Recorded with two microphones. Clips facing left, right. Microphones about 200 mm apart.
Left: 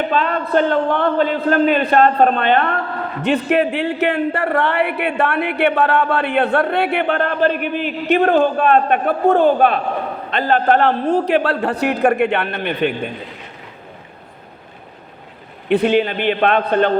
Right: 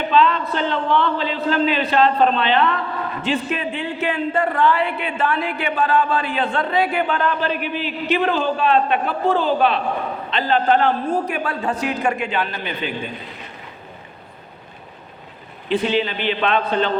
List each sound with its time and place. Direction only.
0.1 s a man's voice: 50° left (ahead or behind)
3.2 s a man's voice: 65° left (ahead or behind)
15.7 s a man's voice: 55° left (ahead or behind)